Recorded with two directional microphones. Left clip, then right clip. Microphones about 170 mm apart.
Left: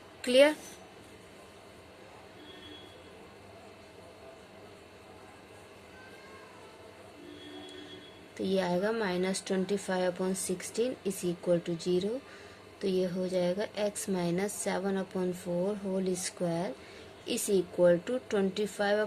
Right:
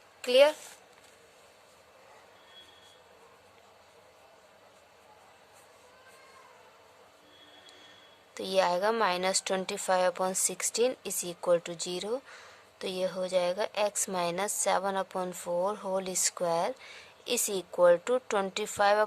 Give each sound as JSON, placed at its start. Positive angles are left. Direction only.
{"t": 0.2, "sound": "speech", "side_deg": -40}
{"t": 8.4, "sound": "a woman's voice", "side_deg": -40}